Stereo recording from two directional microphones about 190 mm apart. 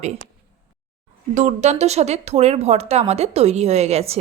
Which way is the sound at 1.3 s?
40° right (ahead or behind).